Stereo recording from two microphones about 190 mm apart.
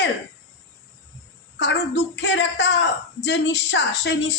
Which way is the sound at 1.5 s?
65° left (ahead or behind).